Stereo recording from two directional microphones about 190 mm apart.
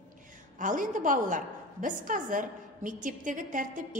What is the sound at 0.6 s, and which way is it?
A woman's voice, 45° right (ahead or behind).